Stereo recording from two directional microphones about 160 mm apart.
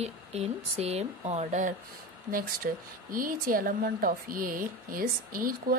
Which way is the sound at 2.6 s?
65° right (ahead or behind).